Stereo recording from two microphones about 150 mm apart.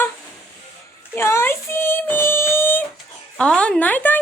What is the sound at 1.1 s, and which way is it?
Child singing, 15° left (ahead or behind).